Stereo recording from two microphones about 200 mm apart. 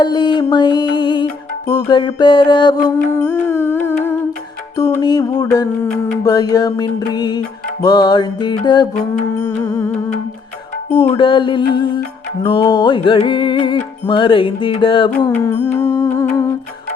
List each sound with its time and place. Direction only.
0.0 s music: 20° left (ahead or behind)
10.9 s music: 25° left (ahead or behind)
15.3 s music: 15° left (ahead or behind)